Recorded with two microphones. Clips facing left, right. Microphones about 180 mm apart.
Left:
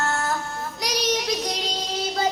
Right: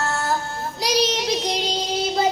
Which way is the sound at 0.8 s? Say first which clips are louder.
Right 4 dB; 30° right (ahead or behind).